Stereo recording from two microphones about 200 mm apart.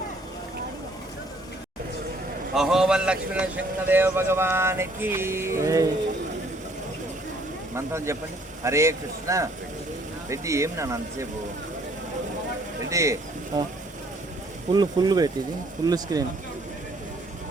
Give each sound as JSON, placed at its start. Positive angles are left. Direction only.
{"t": 2.6, "sound": "speech", "side_deg": -5}
{"t": 7.8, "sound": "speech", "side_deg": -15}
{"t": 12.9, "sound": "speech", "side_deg": -15}
{"t": 14.7, "sound": "speech", "side_deg": -20}